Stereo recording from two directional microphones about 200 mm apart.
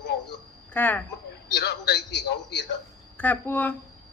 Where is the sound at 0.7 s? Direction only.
10° left (ahead or behind).